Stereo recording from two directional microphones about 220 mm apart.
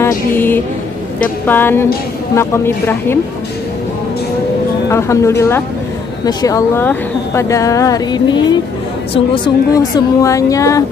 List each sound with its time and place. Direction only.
0.3 s speech: 10° left (ahead or behind)
4.8 s speech: 15° left (ahead or behind)